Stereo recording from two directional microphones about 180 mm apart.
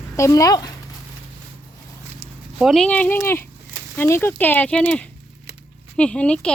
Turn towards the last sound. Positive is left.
turn(degrees=5)  # may be behind; listen again after turning